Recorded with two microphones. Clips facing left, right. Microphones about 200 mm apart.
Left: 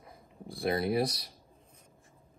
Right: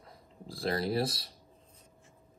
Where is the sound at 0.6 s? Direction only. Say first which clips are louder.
Left 2 dB; 15° left (ahead or behind).